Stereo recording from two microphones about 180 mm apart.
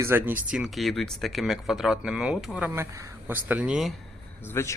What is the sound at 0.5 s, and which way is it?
Speech, centre (ahead or behind).